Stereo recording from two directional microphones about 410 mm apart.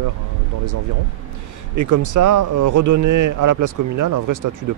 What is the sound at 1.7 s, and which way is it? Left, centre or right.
A man's voice, right.